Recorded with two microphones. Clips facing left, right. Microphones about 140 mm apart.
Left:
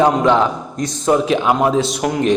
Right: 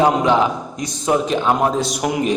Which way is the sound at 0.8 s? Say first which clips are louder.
Left 3 dB; centre (ahead or behind).